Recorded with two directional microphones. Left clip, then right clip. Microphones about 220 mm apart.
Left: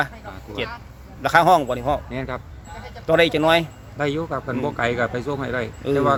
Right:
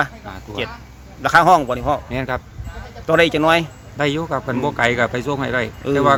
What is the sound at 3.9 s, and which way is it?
Speech, 35° right (ahead or behind).